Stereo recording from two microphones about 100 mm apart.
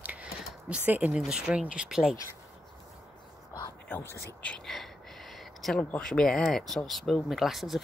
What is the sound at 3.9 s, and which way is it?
Speech, 25° left (ahead or behind).